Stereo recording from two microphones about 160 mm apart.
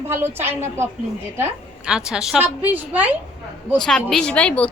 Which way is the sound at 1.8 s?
5° right (ahead or behind).